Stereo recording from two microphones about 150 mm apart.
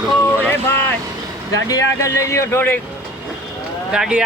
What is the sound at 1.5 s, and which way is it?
Speech, 25° left (ahead or behind).